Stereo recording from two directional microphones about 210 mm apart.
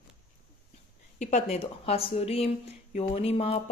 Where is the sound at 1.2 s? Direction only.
30° left (ahead or behind).